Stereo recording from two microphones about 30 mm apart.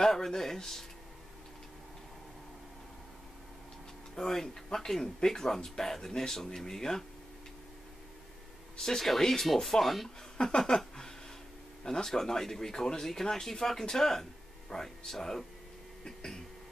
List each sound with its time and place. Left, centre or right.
0.0 s speech: centre
4.1 s speech: centre
8.7 s speech: centre
9.4 s speech: centre
10.4 s speech: left
11.8 s speech: centre